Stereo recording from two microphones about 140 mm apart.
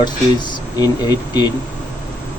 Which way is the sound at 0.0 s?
30° left (ahead or behind).